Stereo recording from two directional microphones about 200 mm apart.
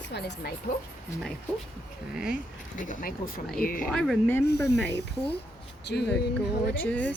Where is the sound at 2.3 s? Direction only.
40° left (ahead or behind).